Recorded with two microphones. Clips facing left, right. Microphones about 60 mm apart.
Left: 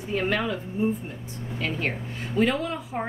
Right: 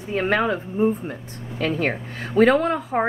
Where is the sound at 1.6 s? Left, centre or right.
Right.